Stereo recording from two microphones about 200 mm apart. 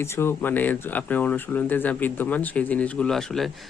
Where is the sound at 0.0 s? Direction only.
10° left (ahead or behind).